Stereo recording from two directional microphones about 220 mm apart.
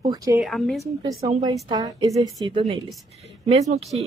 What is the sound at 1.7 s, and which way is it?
Speech, 15° right (ahead or behind).